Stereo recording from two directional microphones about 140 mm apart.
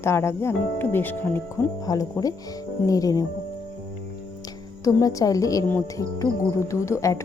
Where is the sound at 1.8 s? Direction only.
25° left (ahead or behind).